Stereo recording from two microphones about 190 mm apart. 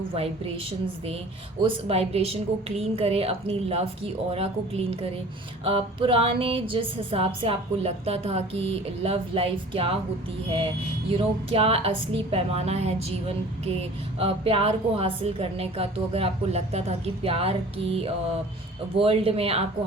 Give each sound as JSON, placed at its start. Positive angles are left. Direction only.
{"t": 0.1, "sound": "music", "side_deg": -30}
{"t": 1.6, "sound": "a woman's voice", "side_deg": -30}
{"t": 5.6, "sound": "music", "side_deg": -30}
{"t": 11.1, "sound": "a woman's voice", "side_deg": -30}